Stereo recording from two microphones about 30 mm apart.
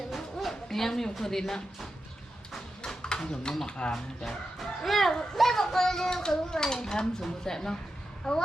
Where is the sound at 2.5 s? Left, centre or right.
Centre.